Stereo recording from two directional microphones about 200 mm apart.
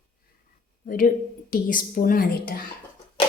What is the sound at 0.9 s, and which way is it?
A woman's voice, 45° left (ahead or behind).